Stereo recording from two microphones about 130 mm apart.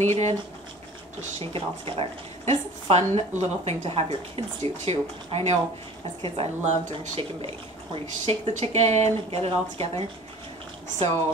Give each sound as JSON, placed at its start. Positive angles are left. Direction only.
{"t": 0.0, "sound": "speech", "side_deg": -65}
{"t": 1.4, "sound": "a woman's voice", "side_deg": -45}
{"t": 6.6, "sound": "speech", "side_deg": -65}
{"t": 7.2, "sound": "a woman's voice", "side_deg": -50}